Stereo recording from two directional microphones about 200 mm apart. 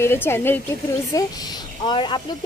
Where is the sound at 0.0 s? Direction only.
10° left (ahead or behind).